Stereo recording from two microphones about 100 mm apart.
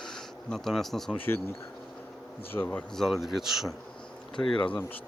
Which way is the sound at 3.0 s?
Centre (ahead or behind).